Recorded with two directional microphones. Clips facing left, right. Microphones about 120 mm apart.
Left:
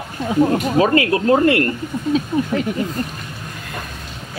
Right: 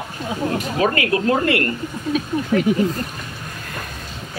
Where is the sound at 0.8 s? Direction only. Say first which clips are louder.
Left 3 dB; 30° left (ahead or behind).